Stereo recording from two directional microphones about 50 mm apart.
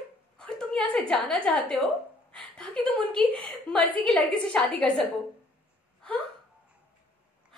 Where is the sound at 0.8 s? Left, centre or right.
Left.